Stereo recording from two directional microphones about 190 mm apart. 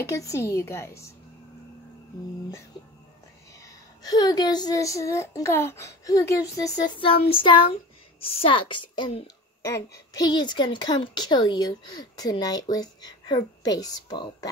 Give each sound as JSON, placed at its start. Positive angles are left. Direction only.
{"t": 0.0, "sound": "speech", "side_deg": 15}
{"t": 3.6, "sound": "a child's voice", "side_deg": 20}